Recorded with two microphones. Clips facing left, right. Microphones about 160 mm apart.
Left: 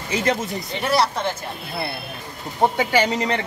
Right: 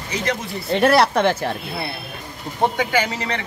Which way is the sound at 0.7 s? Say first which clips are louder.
Right 6 dB; 65° right (ahead or behind).